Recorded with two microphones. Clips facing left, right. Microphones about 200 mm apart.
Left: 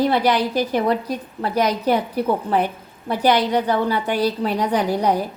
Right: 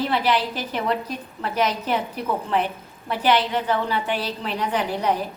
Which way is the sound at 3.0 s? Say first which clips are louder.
Left 3 dB; 40° left (ahead or behind).